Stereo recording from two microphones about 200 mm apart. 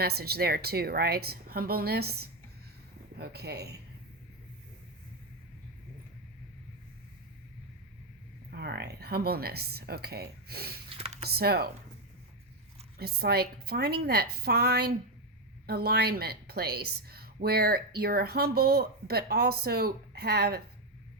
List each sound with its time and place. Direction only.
0.0 s a woman's voice: 50° right (ahead or behind)
8.5 s a woman's voice: 55° right (ahead or behind)
10.9 s a sound: 30° right (ahead or behind)
11.3 s a woman's voice: 50° right (ahead or behind)
13.0 s a woman's voice: 50° right (ahead or behind)